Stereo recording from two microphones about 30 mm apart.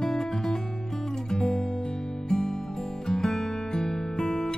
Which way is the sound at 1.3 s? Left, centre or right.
Centre.